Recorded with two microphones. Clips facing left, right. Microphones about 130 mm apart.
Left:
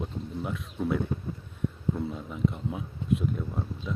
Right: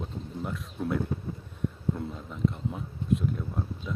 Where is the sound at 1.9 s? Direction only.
Centre (ahead or behind).